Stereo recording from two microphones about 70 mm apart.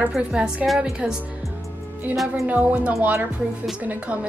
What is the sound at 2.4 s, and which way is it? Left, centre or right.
A woman's voice, right.